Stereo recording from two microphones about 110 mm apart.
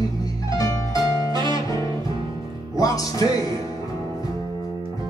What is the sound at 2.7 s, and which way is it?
Music, 35° left (ahead or behind).